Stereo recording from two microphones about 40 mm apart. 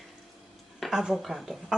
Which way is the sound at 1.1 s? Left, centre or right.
Centre.